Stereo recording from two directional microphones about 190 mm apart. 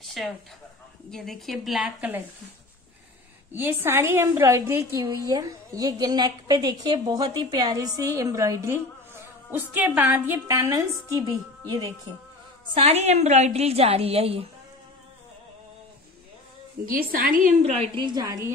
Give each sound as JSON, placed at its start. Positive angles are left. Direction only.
{"t": 0.0, "sound": "a sound", "side_deg": 0}
{"t": 1.1, "sound": "a woman's voice", "side_deg": 0}
{"t": 3.5, "sound": "a woman's voice", "side_deg": -10}
{"t": 12.7, "sound": "a woman's voice", "side_deg": -35}
{"t": 16.8, "sound": "a woman's voice", "side_deg": -50}